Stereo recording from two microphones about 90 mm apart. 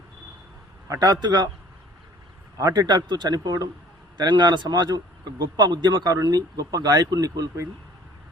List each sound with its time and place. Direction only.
0.9 s speech: 40° right (ahead or behind)
2.6 s speech: 45° right (ahead or behind)